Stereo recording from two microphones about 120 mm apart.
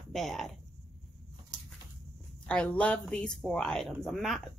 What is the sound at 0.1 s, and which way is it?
Speech, centre (ahead or behind).